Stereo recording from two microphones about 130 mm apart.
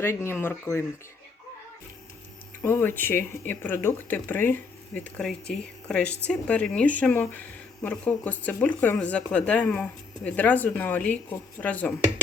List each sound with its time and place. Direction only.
0.0 s speech: 20° left (ahead or behind)
2.6 s speech: 15° left (ahead or behind)